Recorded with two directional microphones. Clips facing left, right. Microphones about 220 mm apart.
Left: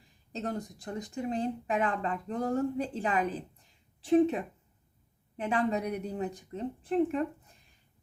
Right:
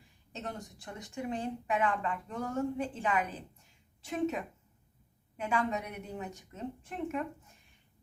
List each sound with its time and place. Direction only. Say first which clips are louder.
0.3 s speech: left 6 dB; 35° left (ahead or behind)